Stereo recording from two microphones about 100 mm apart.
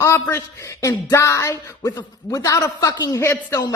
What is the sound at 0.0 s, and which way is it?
A man's voice, 25° left (ahead or behind).